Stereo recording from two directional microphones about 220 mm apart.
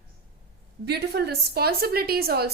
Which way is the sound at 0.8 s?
50° right (ahead or behind).